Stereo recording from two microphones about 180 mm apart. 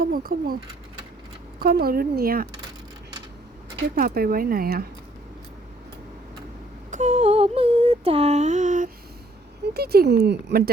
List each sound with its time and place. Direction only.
0.0 s speech: 55° right (ahead or behind)
1.5 s speech: 55° right (ahead or behind)
3.9 s speech: 55° right (ahead or behind)
6.9 s a sound: 40° right (ahead or behind)
9.7 s speech: 60° right (ahead or behind)